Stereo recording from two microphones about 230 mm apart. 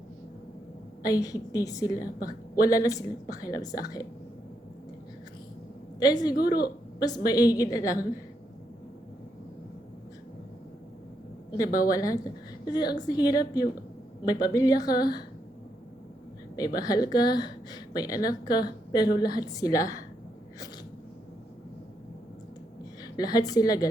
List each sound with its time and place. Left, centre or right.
1.0 s a woman's voice: centre
6.0 s a woman's voice: centre
11.5 s a woman's voice: centre
16.6 s a woman's voice: centre
23.1 s a woman's voice: centre